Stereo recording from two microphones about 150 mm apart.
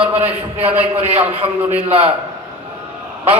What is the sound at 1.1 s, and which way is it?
Speech, 45° right (ahead or behind).